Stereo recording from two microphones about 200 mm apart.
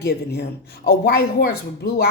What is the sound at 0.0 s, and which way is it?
A woman's voice, 55° left (ahead or behind).